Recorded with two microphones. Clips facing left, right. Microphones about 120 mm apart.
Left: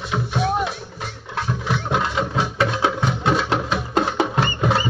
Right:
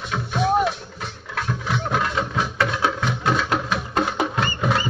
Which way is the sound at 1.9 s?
20° left (ahead or behind).